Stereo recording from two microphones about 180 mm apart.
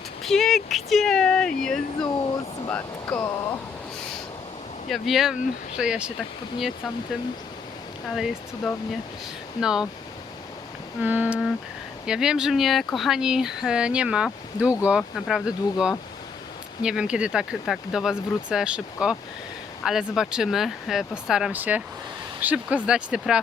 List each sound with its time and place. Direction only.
0.3 s speech: centre (ahead or behind); by 3.6 s 15° left (ahead or behind)
4.9 s speech: centre (ahead or behind)
11.0 s a sound: 10° right (ahead or behind)
12.0 s speech: 5° right (ahead or behind)